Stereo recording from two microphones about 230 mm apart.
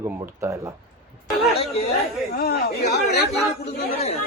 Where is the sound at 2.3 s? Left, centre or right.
Left.